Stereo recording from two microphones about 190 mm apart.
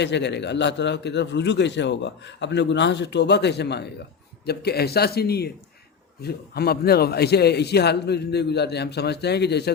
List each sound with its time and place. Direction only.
0.0 s a man's voice: 65° left (ahead or behind)